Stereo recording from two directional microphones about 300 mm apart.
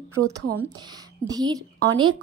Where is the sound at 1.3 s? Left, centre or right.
Centre.